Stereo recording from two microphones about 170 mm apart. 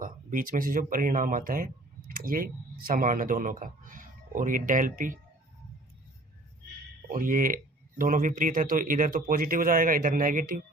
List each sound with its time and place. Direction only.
0.0 s speech: 55° right (ahead or behind)
7.1 s speech: 50° right (ahead or behind)